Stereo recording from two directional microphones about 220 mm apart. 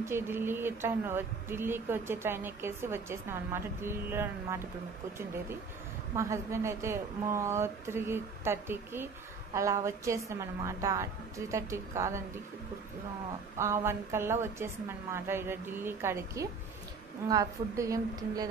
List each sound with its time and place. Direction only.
0.0 s a woman's voice: 10° right (ahead or behind)
6.1 s a woman's voice: 15° right (ahead or behind)
13.6 s a woman's voice: 10° right (ahead or behind)